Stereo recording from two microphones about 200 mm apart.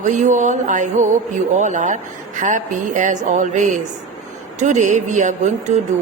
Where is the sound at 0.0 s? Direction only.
40° right (ahead or behind).